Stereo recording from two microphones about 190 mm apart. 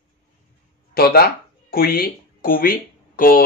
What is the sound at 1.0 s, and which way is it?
Speech, 55° left (ahead or behind).